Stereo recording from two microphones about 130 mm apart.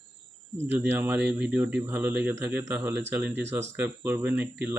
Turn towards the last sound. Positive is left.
turn(degrees=-15)  # may be behind; listen again after turning